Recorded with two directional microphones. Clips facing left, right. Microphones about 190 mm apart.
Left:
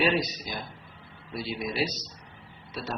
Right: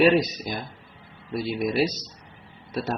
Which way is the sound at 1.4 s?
55° right (ahead or behind).